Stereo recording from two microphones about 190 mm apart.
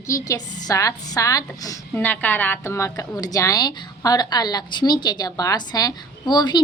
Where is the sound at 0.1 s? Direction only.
15° left (ahead or behind).